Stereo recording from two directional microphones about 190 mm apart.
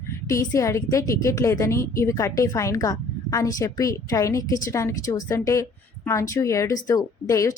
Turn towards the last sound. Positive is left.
turn(degrees=15)  # may be behind; listen again after turning